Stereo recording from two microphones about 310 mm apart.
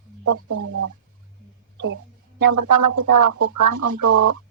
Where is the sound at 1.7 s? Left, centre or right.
Right.